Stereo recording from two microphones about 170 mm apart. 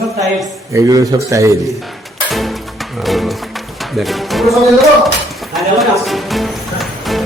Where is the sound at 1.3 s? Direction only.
20° right (ahead or behind).